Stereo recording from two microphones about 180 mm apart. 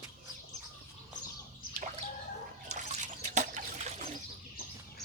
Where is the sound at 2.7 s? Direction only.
40° right (ahead or behind).